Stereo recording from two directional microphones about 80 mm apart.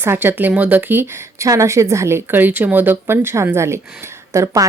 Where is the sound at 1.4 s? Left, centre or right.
Right.